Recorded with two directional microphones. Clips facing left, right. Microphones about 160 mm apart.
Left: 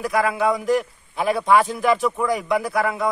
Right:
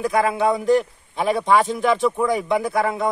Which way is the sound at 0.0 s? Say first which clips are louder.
Right 2 dB; 25° right (ahead or behind).